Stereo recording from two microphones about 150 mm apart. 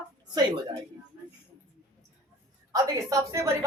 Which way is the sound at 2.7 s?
25° right (ahead or behind).